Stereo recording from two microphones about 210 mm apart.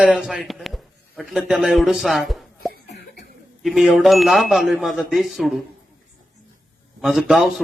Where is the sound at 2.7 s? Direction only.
50° left (ahead or behind).